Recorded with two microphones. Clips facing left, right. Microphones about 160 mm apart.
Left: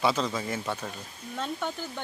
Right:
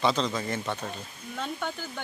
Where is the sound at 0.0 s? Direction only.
5° left (ahead or behind).